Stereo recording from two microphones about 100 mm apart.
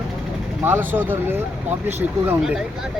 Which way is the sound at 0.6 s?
20° right (ahead or behind).